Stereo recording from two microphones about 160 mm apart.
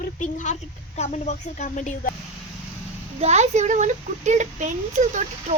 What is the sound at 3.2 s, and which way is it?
Speech, 45° right (ahead or behind).